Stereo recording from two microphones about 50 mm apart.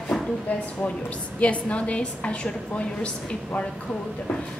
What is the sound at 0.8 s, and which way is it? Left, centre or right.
A woman's voice, left.